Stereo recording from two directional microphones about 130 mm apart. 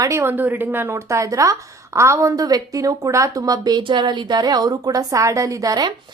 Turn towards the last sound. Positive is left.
turn(degrees=-35)  # may be behind; listen again after turning